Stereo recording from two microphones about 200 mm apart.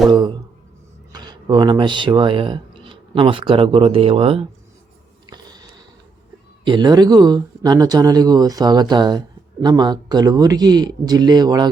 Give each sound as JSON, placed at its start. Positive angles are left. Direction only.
{"t": 0.1, "sound": "speech", "side_deg": -20}
{"t": 5.2, "sound": "a sound", "side_deg": -20}
{"t": 6.7, "sound": "speech", "side_deg": -20}